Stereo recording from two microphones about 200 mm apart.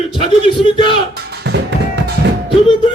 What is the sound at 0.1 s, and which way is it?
Speech, 25° left (ahead or behind).